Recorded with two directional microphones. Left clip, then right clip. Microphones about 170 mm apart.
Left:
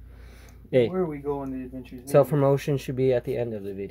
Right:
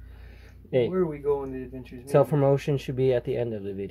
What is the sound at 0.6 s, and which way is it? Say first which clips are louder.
Speech: left 3 dB; 20° left (ahead or behind).